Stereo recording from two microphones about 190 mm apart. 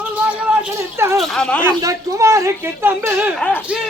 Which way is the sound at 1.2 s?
Centre (ahead or behind).